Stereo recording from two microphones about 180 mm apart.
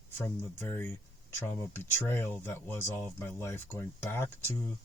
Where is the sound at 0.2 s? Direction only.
10° left (ahead or behind).